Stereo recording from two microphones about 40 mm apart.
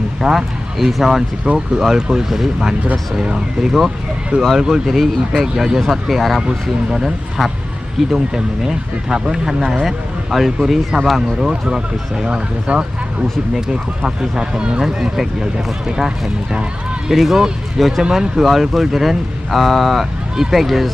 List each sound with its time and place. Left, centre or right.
0.2 s speech: centre
5.3 s speech: centre
11.7 s speech: centre
12.7 s speech: right
13.7 s speech: right; by 20.9 s centre